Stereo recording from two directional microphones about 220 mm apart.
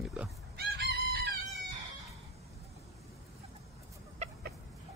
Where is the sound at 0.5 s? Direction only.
45° right (ahead or behind).